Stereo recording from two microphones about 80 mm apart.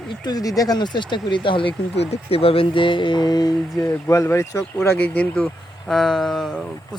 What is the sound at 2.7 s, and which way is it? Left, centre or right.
Speech, left.